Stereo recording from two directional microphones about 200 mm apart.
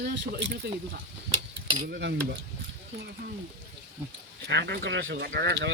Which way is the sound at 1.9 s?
60° right (ahead or behind).